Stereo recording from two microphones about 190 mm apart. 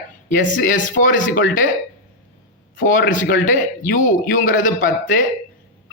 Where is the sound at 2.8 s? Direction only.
45° left (ahead or behind).